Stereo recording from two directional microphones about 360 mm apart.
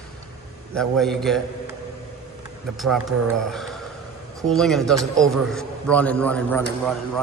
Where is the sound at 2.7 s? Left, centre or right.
Centre.